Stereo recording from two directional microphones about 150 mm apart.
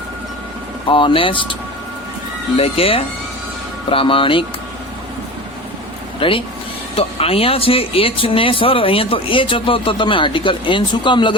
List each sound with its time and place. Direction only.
0.9 s speech: 35° left (ahead or behind)
2.6 s speech: 40° left (ahead or behind)
6.1 s speech: 35° left (ahead or behind)